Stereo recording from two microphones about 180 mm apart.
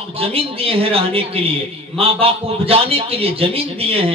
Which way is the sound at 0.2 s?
30° right (ahead or behind).